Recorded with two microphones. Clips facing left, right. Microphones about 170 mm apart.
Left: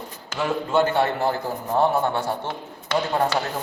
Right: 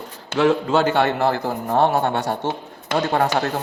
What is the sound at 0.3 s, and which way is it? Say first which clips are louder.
A man's voice: right 4 dB; 90° right.